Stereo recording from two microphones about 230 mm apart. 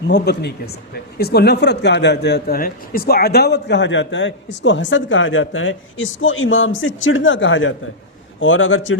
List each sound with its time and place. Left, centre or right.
0.1 s speech: left